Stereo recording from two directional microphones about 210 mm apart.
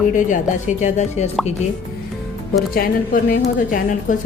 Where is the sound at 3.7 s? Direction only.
40° left (ahead or behind).